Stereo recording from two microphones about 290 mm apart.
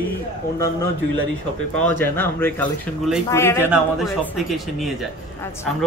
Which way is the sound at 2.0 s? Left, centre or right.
Centre.